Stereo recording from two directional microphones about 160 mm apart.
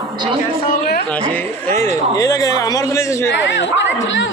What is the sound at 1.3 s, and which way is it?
A man's voice, 15° left (ahead or behind).